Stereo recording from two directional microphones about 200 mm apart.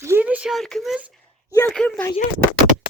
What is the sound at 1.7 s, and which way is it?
Speech, 5° left (ahead or behind).